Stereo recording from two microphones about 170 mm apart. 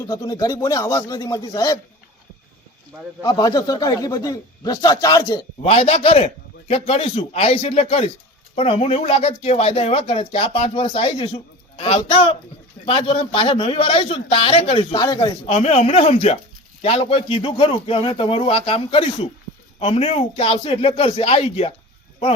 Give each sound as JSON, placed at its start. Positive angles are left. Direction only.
{"t": 0.1, "sound": "a man's voice", "side_deg": 20}
{"t": 3.2, "sound": "a man's voice", "side_deg": 25}
{"t": 5.6, "sound": "speech", "side_deg": 35}
{"t": 15.4, "sound": "speech", "side_deg": 35}